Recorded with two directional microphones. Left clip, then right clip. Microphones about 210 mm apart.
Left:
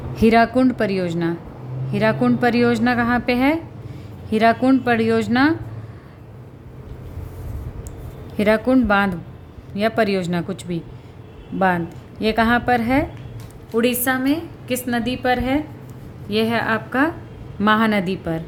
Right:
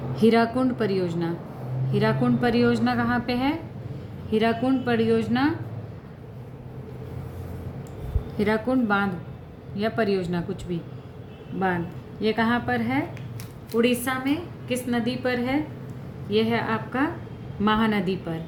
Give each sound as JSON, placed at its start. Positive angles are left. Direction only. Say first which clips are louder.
{"t": 0.2, "sound": "a woman's voice", "louder": "left 6 dB", "side_deg": 45}
{"t": 8.4, "sound": "a woman's voice", "louder": "left 7 dB", "side_deg": 50}
{"t": 12.2, "sound": "a woman's voice", "louder": "left 6 dB", "side_deg": 55}